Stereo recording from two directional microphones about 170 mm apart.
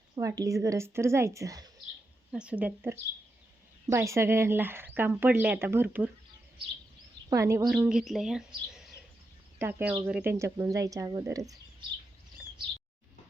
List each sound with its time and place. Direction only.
0.2 s speech: 20° right (ahead or behind)
2.3 s speech: 5° right (ahead or behind)
7.3 s a woman's voice: 20° right (ahead or behind)
7.9 s speech: 5° right (ahead or behind)
9.6 s speech: 15° right (ahead or behind)